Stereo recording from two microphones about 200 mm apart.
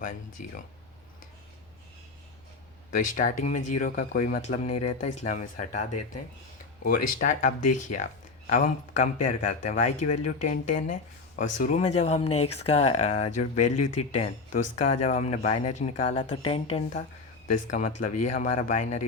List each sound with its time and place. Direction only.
3.2 s speech: 40° left (ahead or behind)
6.8 s speech: 45° left (ahead or behind)
17.7 s speech: 40° left (ahead or behind)